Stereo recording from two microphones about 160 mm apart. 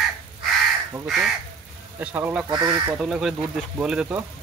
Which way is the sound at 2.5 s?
30° right (ahead or behind).